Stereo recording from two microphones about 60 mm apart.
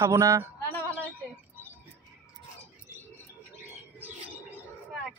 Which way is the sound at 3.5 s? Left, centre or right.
Right.